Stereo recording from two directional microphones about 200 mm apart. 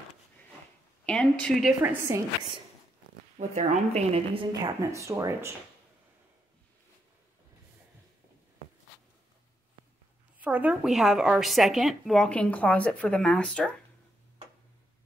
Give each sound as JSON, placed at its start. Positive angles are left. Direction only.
{"t": 1.0, "sound": "a woman's voice", "side_deg": 5}
{"t": 1.8, "sound": "speech", "side_deg": -15}
{"t": 3.3, "sound": "a woman's voice", "side_deg": -35}
{"t": 4.5, "sound": "speech", "side_deg": -15}
{"t": 10.4, "sound": "a woman's voice", "side_deg": -5}